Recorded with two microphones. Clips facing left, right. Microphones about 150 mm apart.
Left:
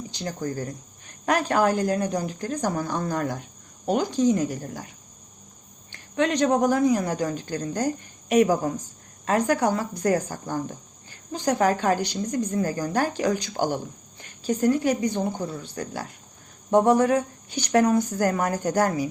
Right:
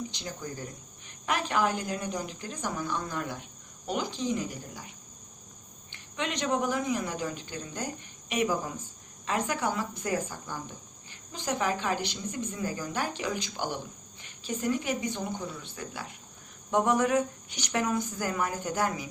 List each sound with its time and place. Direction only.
0.1 s a woman's voice: 40° left (ahead or behind)
6.1 s a woman's voice: 45° left (ahead or behind)
16.7 s speech: 35° left (ahead or behind)